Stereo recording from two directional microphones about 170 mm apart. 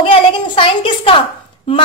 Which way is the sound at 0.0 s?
30° left (ahead or behind).